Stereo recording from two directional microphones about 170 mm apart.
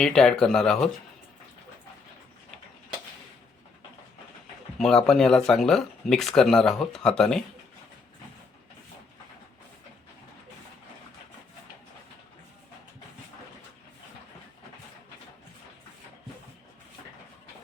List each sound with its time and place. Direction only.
0.0 s speech: 5° left (ahead or behind)
4.8 s speech: 5° left (ahead or behind)